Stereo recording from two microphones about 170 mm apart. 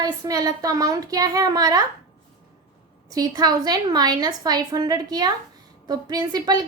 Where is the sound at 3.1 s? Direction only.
20° right (ahead or behind).